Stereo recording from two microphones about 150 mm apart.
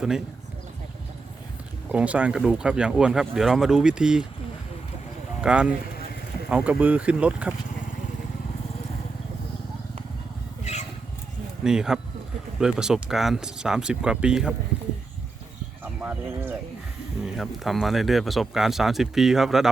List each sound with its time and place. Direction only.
1.9 s speech: 10° right (ahead or behind)
5.4 s speech: 10° right (ahead or behind)
10.6 s a sound: 50° left (ahead or behind)
11.6 s speech: 5° right (ahead or behind)
15.8 s speech: 10° right (ahead or behind)
17.3 s speech: centre (ahead or behind)